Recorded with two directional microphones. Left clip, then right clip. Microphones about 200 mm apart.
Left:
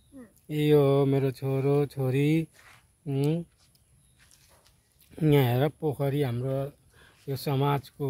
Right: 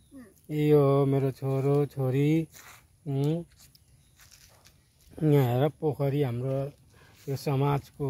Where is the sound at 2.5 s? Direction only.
65° right (ahead or behind).